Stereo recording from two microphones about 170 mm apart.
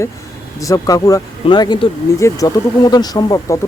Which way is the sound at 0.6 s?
20° left (ahead or behind).